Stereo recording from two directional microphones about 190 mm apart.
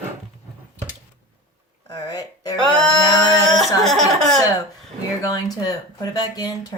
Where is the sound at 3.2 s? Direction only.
20° left (ahead or behind).